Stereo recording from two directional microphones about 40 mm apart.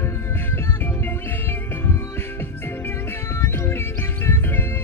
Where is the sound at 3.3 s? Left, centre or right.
Left.